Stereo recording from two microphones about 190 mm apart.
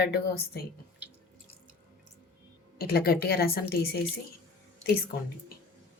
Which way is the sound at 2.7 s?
55° left (ahead or behind).